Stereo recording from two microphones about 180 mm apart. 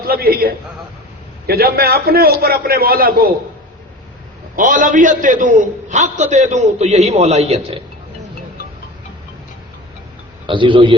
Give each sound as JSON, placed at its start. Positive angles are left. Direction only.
{"t": 0.1, "sound": "a man's voice", "side_deg": -55}
{"t": 4.5, "sound": "a man's voice", "side_deg": -45}
{"t": 10.4, "sound": "a man's voice", "side_deg": -25}